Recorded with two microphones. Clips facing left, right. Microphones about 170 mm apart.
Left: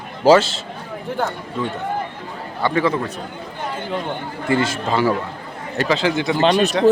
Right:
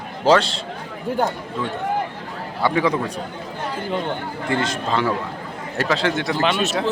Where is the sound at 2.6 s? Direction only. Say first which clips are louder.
Left 1 dB; 10° right (ahead or behind).